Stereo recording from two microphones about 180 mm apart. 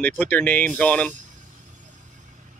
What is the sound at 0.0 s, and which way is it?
Speech, 10° left (ahead or behind).